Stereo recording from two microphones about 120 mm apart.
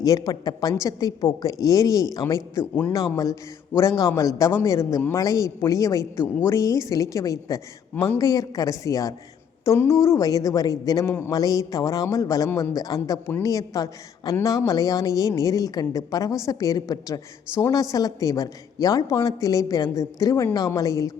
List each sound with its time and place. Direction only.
0.0 s a woman's voice: 30° left (ahead or behind)
12.5 s a man's voice: 15° left (ahead or behind)
12.7 s a woman's voice: 30° left (ahead or behind)